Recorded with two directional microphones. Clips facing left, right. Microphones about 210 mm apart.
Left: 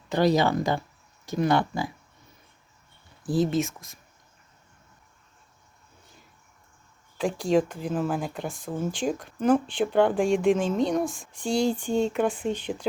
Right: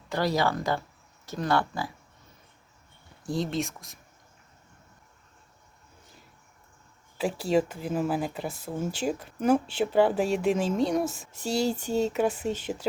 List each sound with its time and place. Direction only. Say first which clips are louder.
0.1 s speech: left 5 dB; 20° left (ahead or behind)
3.2 s speech: left 5 dB; 5° left (ahead or behind)
7.2 s speech: left 2 dB; 5° right (ahead or behind)